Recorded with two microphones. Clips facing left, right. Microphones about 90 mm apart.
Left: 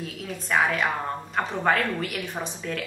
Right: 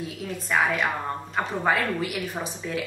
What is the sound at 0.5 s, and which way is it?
A woman's voice, centre (ahead or behind).